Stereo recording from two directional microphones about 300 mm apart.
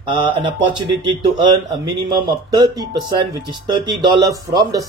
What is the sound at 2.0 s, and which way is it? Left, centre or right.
A man's voice, centre.